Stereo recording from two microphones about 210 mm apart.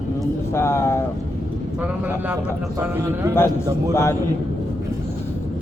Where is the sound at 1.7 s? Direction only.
5° right (ahead or behind).